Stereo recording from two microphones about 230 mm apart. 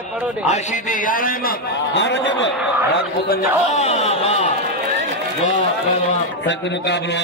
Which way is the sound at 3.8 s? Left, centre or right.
Left.